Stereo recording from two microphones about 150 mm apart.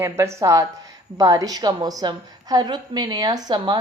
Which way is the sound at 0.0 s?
20° right (ahead or behind).